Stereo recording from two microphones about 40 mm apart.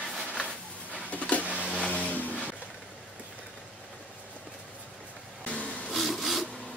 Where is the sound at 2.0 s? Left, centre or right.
Left.